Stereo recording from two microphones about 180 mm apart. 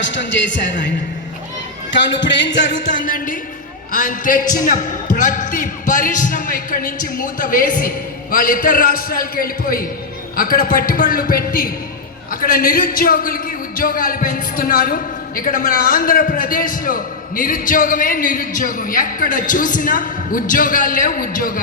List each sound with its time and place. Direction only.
0.0 s music: 90° left
2.9 s a man's voice: 50° left (ahead or behind)